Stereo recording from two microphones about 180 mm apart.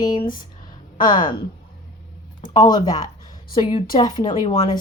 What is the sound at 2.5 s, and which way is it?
A woman's voice, 20° left (ahead or behind).